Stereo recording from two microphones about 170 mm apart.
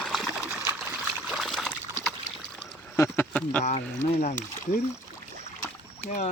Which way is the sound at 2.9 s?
10° left (ahead or behind).